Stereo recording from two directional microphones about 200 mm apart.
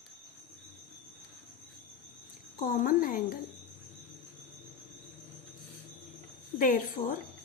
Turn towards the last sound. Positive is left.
turn(degrees=40)  # may be behind; listen again after turning